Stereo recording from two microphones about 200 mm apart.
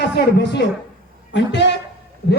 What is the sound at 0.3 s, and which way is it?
A man's voice, 60° left (ahead or behind).